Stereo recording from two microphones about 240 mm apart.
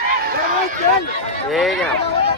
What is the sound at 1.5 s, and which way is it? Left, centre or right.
Run, centre.